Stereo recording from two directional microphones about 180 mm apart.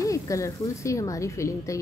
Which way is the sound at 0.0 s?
15° left (ahead or behind).